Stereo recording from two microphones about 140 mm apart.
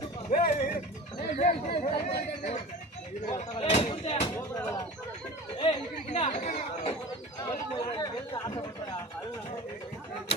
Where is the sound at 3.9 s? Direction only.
45° left (ahead or behind).